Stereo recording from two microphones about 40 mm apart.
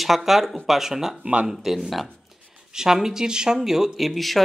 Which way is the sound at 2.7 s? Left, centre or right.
Centre.